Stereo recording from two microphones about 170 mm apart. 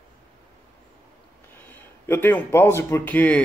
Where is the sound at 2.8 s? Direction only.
15° left (ahead or behind).